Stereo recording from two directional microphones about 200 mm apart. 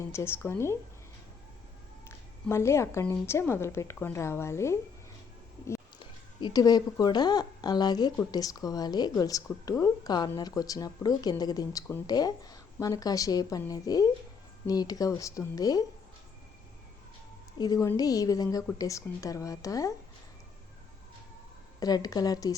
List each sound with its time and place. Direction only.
0.1 s a woman's voice: 10° left (ahead or behind)
2.0 s a woman's voice: 15° left (ahead or behind)
6.0 s a woman's voice: 20° left (ahead or behind)
17.6 s a woman's voice: 15° left (ahead or behind)
21.8 s a woman's voice: 20° left (ahead or behind)